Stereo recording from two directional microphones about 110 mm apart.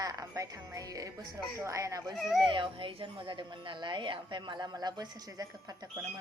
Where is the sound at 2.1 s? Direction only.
Centre (ahead or behind).